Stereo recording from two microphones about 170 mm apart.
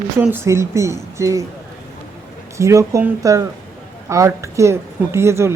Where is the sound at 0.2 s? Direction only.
10° right (ahead or behind).